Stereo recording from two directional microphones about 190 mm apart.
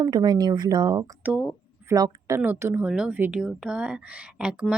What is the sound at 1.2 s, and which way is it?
Speech, 5° right (ahead or behind).